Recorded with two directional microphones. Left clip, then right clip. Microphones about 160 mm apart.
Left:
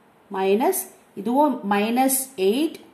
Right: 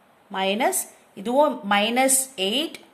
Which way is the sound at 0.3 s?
45° right (ahead or behind).